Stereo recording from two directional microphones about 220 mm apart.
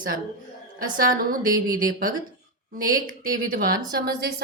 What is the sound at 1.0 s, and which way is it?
Speech, 40° right (ahead or behind).